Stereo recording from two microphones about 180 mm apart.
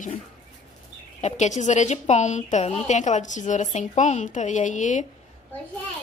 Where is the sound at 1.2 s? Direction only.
40° left (ahead or behind).